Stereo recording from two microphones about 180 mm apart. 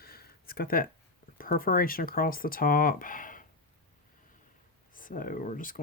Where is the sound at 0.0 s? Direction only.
60° left (ahead or behind).